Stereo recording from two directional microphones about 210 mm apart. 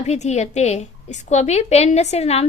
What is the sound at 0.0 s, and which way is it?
A woman's voice, 35° left (ahead or behind).